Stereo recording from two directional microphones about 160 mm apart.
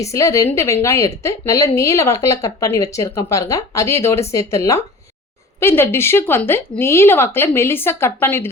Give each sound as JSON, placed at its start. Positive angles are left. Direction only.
{"t": 0.0, "sound": "a woman's voice", "side_deg": 20}